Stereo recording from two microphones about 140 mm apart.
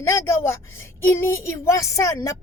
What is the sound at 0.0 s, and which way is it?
A woman's voice, 20° left (ahead or behind).